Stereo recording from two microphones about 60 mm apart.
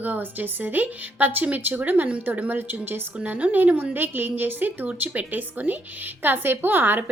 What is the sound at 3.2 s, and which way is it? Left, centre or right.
A woman's voice, right.